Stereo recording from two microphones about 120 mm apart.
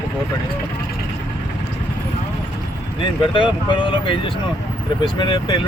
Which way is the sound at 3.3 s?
45° left (ahead or behind).